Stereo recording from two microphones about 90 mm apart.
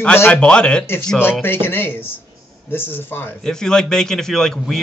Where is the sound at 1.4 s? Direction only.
25° left (ahead or behind).